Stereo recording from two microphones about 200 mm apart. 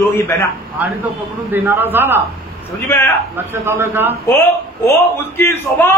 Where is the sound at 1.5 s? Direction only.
10° right (ahead or behind).